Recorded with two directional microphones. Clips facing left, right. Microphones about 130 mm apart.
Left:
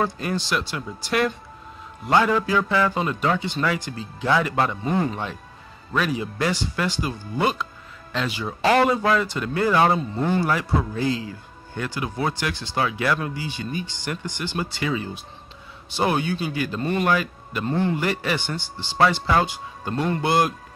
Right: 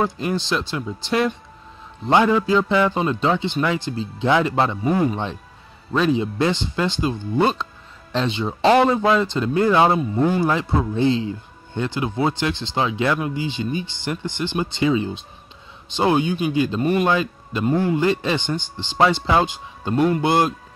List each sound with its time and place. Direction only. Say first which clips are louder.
0.0 s speech: right 3 dB; 15° right (ahead or behind)